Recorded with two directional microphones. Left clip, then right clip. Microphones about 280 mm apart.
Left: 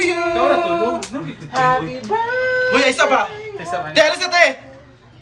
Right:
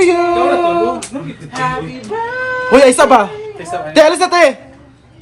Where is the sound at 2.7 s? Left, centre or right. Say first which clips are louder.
Right 10 dB; centre.